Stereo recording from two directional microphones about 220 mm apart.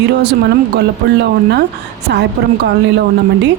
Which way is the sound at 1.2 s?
50° right (ahead or behind).